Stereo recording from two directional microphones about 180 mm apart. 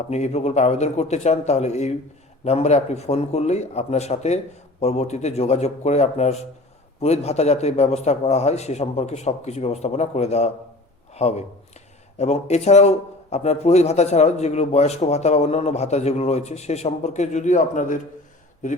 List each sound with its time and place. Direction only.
0.1 s speech: 35° left (ahead or behind)